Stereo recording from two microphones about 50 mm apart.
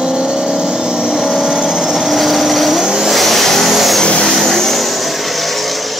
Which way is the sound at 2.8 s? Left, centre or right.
Centre.